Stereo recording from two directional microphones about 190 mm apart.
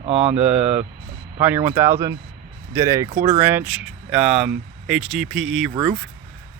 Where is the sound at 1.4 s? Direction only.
10° right (ahead or behind).